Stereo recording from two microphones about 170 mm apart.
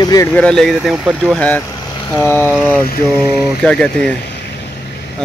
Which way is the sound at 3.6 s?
5° left (ahead or behind).